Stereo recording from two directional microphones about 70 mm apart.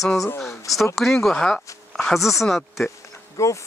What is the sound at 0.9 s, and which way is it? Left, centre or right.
Speech, centre.